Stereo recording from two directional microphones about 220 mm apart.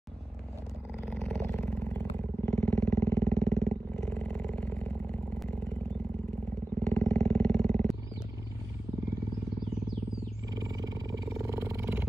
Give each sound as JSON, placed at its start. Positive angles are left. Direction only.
{"t": 1.1, "sound": "a sound", "side_deg": 5}
{"t": 6.8, "sound": "wild animals", "side_deg": 5}
{"t": 10.5, "sound": "roar", "side_deg": -15}